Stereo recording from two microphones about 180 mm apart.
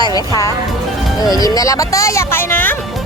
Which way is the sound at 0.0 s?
20° left (ahead or behind).